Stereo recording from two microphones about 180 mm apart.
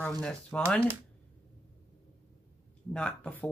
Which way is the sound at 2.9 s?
5° left (ahead or behind).